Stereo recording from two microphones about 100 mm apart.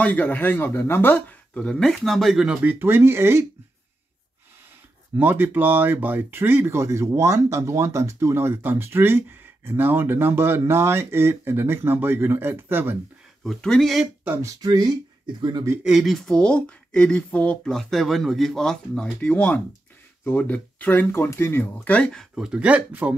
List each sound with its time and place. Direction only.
0.0 s speech: 15° left (ahead or behind); by 3.4 s 25° right (ahead or behind)
5.1 s speech: 20° right (ahead or behind)
13.4 s speech: 5° left (ahead or behind)
14.4 s speech: 40° right (ahead or behind)
15.8 s speech: 5° right (ahead or behind); by 21.6 s 25° left (ahead or behind)
21.7 s speech: 10° left (ahead or behind); by 23.1 s 15° right (ahead or behind)